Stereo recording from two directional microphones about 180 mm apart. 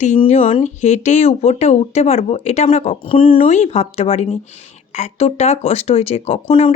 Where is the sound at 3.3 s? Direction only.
40° left (ahead or behind).